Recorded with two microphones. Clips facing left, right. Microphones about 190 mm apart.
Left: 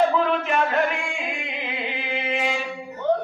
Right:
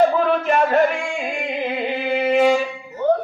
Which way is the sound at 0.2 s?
40° right (ahead or behind).